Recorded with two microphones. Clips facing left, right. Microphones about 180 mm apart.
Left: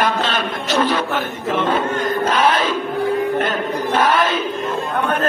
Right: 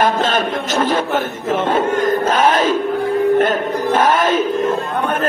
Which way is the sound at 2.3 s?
45° right (ahead or behind).